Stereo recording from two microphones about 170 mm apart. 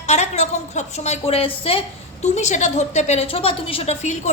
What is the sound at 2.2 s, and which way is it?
A woman's voice, 45° left (ahead or behind).